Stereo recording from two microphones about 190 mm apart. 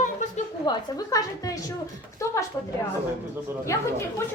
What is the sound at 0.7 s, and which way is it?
Speech, 20° left (ahead or behind).